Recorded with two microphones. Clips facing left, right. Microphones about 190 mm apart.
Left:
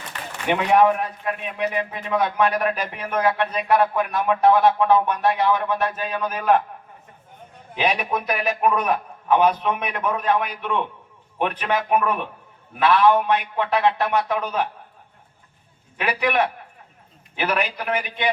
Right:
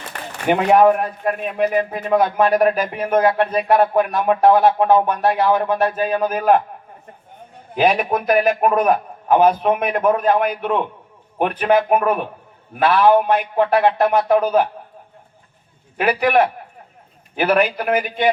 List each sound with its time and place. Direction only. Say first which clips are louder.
0.1 s speech: right 5 dB; 45° right (ahead or behind)
3.0 s a man's voice: right 9 dB; 35° right (ahead or behind)
3.2 s speech: right 5 dB; 45° right (ahead or behind)
7.8 s a man's voice: right 6 dB; 50° right (ahead or behind)
16.0 s speech: right 6 dB; 45° right (ahead or behind)